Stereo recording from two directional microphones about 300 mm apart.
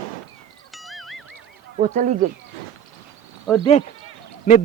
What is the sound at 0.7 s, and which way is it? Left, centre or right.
Music, centre.